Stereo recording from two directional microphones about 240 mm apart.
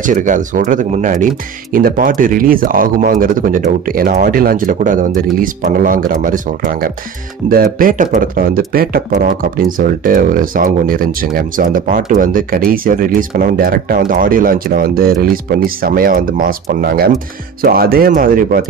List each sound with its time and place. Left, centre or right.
0.0 s speech: right